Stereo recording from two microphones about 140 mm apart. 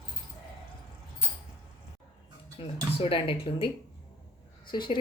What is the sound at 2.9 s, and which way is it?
Speech, 40° left (ahead or behind).